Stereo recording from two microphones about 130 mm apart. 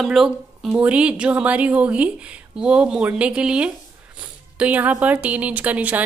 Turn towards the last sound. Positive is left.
turn(degrees=-10)  # may be behind; listen again after turning